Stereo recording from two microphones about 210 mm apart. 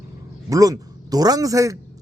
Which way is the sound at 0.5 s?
15° right (ahead or behind).